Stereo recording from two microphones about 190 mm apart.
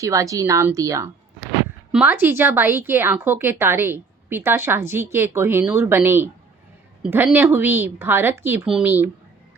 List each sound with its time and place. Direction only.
0.0 s a woman's voice: 15° right (ahead or behind)